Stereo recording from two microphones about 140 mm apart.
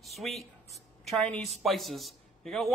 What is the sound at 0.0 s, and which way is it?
Speech, centre (ahead or behind).